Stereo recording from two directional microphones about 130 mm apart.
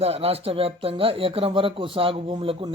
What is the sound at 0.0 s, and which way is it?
Speech, 50° right (ahead or behind).